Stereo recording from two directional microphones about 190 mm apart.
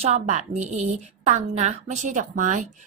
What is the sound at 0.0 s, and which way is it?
A woman's voice, 35° right (ahead or behind).